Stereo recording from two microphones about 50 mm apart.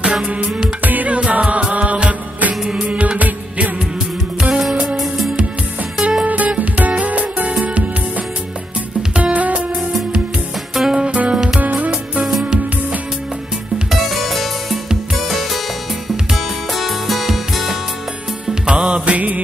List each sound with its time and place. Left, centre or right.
0.0 s music: centre
0.8 s music: right
4.4 s music: centre
4.6 s music: centre
6.2 s music: right
9.1 s music: right
9.8 s music: centre
11.0 s music: centre
11.6 s music: right
13.8 s music: centre
18.5 s music: centre